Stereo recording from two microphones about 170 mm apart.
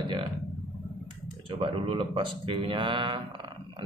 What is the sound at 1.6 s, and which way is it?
A man's voice, 30° right (ahead or behind).